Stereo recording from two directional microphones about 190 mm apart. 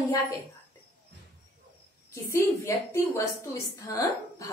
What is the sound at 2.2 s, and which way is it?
A woman's voice, 15° left (ahead or behind).